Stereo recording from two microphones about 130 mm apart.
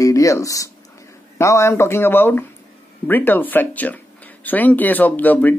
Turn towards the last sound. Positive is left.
turn(degrees=15)  # may be behind; listen again after turning